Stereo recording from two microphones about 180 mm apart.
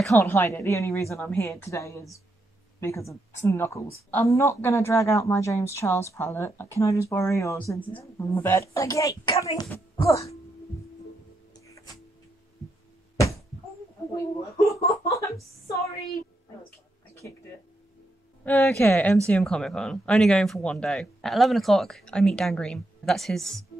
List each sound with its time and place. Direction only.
0.1 s speech: 15° left (ahead or behind)
11.6 s music: 15° left (ahead or behind)
14.1 s speech: 15° left (ahead or behind)
18.4 s speech: 10° left (ahead or behind)